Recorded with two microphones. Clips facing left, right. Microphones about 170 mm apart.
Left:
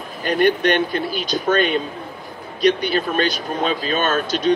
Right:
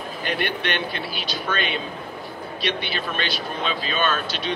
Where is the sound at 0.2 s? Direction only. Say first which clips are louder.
Left 10 dB; 45° left (ahead or behind).